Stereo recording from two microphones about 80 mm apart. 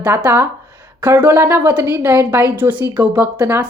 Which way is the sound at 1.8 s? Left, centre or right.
Right.